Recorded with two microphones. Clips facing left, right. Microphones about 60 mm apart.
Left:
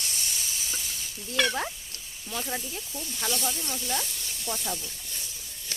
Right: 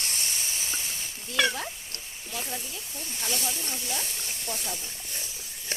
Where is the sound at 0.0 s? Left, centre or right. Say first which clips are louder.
Right 1 dB; right.